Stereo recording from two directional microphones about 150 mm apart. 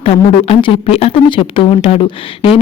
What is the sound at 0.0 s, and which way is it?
Speech, 35° left (ahead or behind).